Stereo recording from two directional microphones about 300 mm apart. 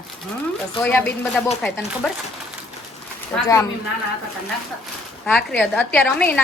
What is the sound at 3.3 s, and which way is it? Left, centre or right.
Speech, centre.